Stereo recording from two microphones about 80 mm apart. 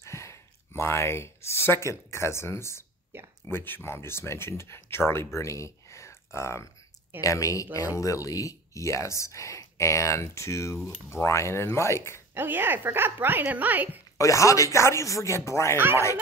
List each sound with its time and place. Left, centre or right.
0.0 s speech: left
3.1 s speech: right
3.4 s speech: left
12.4 s speech: right
14.1 s speech: left